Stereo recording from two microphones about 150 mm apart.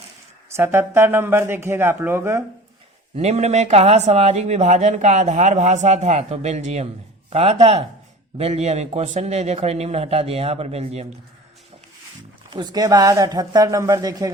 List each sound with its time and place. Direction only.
0.5 s speech: 15° right (ahead or behind)
3.2 s speech: 45° right (ahead or behind)
12.5 s speech: 30° right (ahead or behind)